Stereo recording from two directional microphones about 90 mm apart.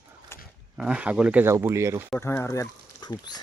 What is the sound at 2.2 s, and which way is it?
Speech, 25° left (ahead or behind).